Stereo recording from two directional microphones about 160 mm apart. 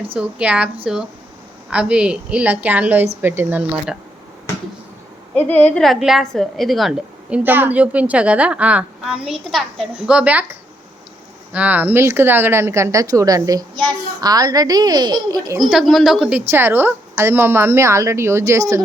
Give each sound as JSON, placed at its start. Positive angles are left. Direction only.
{"t": 0.2, "sound": "speech", "side_deg": -5}
{"t": 1.7, "sound": "speech", "side_deg": -5}
{"t": 5.3, "sound": "a woman's voice", "side_deg": 10}
{"t": 15.5, "sound": "a woman's voice", "side_deg": 0}
{"t": 16.4, "sound": "speech", "side_deg": -15}